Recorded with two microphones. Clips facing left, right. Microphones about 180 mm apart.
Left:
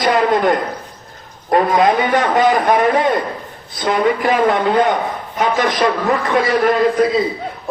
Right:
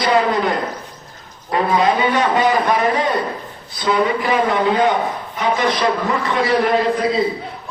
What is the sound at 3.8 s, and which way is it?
A man's voice, 55° left (ahead or behind).